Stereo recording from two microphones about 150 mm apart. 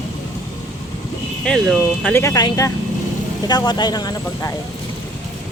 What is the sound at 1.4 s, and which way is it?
Speech, centre (ahead or behind).